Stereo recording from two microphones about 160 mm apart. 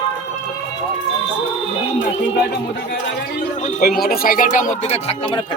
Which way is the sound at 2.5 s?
90° left.